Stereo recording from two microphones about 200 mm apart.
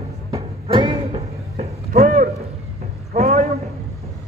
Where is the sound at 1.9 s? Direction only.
45° right (ahead or behind).